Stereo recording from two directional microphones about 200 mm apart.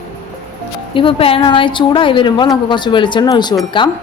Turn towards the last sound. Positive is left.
turn(degrees=25)  # may be behind; listen again after turning